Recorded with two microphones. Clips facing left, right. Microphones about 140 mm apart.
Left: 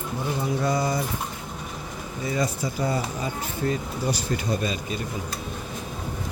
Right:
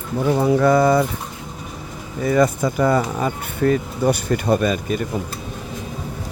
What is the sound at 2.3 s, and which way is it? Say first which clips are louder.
Speech: right 10 dB; 55° right (ahead or behind).